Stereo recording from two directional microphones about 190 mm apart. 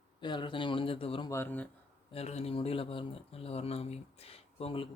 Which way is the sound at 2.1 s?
35° left (ahead or behind).